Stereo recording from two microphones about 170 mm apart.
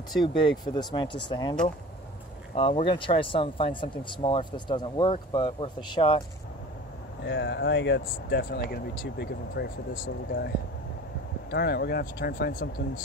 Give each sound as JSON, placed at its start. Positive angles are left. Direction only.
{"t": 0.7, "sound": "speech", "side_deg": 30}
{"t": 7.2, "sound": "speech", "side_deg": 90}
{"t": 11.5, "sound": "speech", "side_deg": 75}